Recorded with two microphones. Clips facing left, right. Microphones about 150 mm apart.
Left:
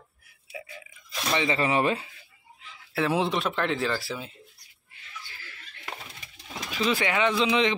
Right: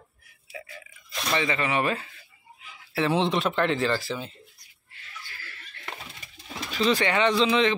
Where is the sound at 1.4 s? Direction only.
30° left (ahead or behind).